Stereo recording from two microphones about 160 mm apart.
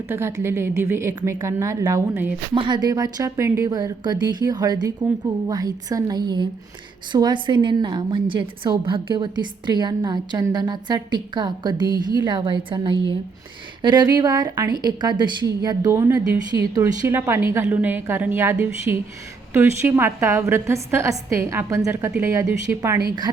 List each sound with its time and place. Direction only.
0.1 s a woman's voice: 15° right (ahead or behind)
2.6 s a woman's voice: 25° right (ahead or behind)